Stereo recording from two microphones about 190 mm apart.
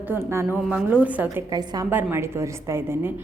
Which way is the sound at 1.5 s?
20° right (ahead or behind).